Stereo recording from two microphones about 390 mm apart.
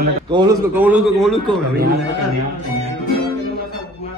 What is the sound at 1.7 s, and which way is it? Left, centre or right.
Speech, right.